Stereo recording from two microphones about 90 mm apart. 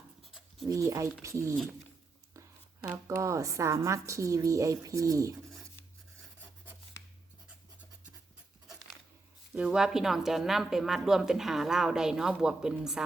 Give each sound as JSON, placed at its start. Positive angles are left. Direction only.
{"t": 0.2, "sound": "writing", "side_deg": 0}
{"t": 0.8, "sound": "a woman's voice", "side_deg": -35}
{"t": 3.2, "sound": "a woman's voice", "side_deg": -35}
{"t": 9.6, "sound": "speech", "side_deg": -5}